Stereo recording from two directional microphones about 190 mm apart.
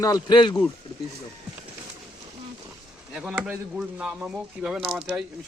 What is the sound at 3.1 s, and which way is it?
Speech, 5° right (ahead or behind).